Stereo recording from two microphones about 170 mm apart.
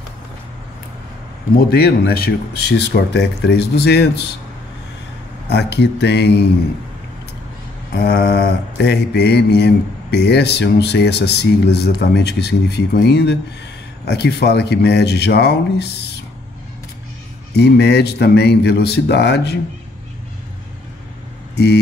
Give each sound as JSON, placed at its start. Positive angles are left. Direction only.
{"t": 1.6, "sound": "mantra", "side_deg": 65}
{"t": 5.5, "sound": "mantra", "side_deg": 80}
{"t": 7.9, "sound": "mantra", "side_deg": 65}
{"t": 17.6, "sound": "mantra", "side_deg": 80}